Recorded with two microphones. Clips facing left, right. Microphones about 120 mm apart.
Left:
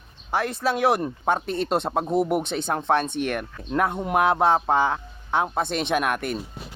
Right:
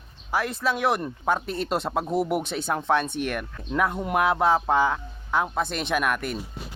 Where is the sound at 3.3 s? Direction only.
40° left (ahead or behind).